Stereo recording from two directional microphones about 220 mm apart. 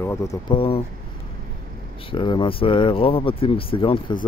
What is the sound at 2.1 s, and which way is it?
Speech, 20° left (ahead or behind).